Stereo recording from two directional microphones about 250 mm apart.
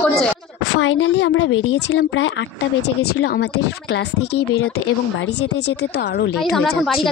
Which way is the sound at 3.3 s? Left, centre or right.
Left.